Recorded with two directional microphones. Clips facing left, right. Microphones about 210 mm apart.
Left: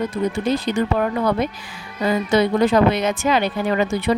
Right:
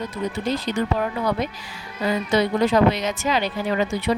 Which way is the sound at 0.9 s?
55° left (ahead or behind).